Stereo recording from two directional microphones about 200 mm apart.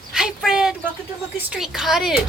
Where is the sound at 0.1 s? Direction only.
5° right (ahead or behind).